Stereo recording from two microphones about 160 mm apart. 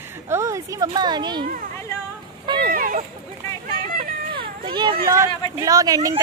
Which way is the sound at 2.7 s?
60° right (ahead or behind).